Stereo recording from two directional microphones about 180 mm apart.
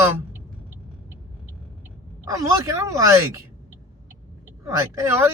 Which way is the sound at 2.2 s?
20° right (ahead or behind).